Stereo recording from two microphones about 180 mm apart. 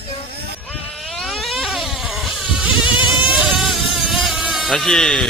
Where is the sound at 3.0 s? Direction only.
25° left (ahead or behind).